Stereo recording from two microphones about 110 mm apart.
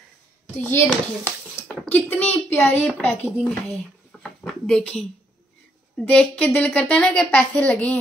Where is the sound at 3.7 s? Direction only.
5° left (ahead or behind).